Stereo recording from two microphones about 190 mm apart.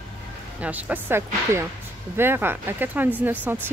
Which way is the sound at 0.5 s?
5° right (ahead or behind).